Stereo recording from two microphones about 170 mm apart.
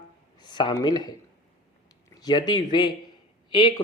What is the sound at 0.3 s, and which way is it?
Speech, 25° left (ahead or behind).